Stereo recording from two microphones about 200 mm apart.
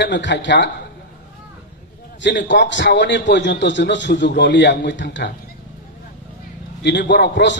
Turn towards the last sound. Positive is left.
turn(degrees=60)  # may be behind; listen again after turning